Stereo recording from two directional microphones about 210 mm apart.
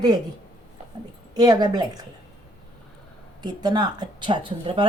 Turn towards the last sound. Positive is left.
turn(degrees=-25)  # may be behind; listen again after turning